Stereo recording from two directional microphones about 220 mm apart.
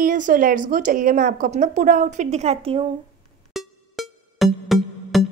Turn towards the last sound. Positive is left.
turn(degrees=0)  # may be behind; listen again after turning